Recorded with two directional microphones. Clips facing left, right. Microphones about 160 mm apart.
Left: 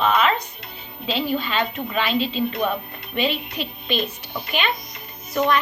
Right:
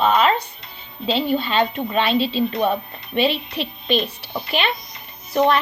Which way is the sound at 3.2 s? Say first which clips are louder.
Right 4 dB; 30° right (ahead or behind).